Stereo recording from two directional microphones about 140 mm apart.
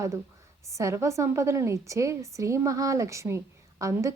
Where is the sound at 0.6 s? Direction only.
20° right (ahead or behind).